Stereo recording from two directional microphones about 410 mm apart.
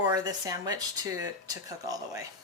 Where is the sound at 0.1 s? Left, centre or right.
Centre.